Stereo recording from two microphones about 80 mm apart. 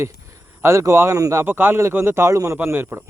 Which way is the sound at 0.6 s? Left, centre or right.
Right.